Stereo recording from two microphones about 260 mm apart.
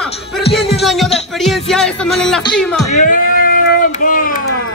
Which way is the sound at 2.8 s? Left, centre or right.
Left.